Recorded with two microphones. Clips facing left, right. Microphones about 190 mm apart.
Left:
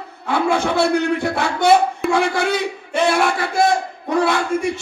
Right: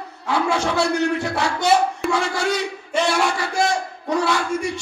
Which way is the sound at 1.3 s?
55° left (ahead or behind).